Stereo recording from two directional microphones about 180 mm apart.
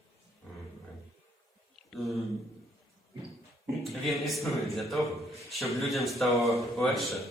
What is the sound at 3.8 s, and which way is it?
A man's voice, centre (ahead or behind).